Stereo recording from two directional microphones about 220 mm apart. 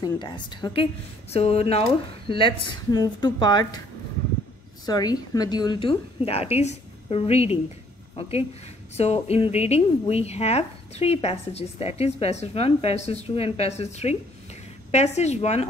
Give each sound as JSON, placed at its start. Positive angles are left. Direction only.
{"t": 0.0, "sound": "speech", "side_deg": 20}
{"t": 4.8, "sound": "speech", "side_deg": 15}